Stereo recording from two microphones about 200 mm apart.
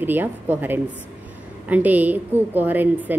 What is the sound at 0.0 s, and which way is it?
Speech, 10° right (ahead or behind).